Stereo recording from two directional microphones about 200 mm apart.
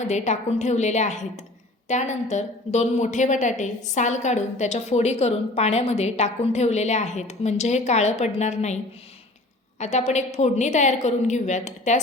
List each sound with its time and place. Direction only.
0.0 s a woman's voice: 35° left (ahead or behind)